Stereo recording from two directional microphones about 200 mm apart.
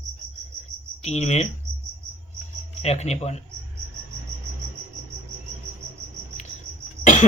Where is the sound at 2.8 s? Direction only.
35° left (ahead or behind).